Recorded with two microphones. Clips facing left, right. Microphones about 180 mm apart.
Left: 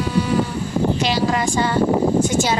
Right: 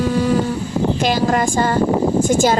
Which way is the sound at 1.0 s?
50° right (ahead or behind).